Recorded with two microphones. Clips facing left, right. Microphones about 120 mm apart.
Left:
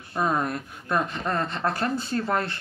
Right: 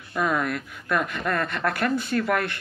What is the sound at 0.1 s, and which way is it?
Speech, 35° left (ahead or behind).